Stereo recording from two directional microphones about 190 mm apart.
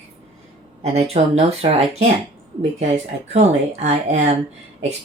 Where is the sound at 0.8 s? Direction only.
35° right (ahead or behind).